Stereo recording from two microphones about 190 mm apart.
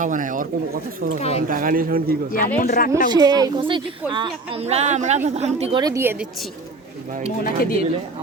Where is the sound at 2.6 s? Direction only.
45° left (ahead or behind).